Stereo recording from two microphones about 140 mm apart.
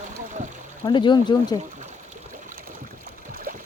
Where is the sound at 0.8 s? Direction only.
35° left (ahead or behind).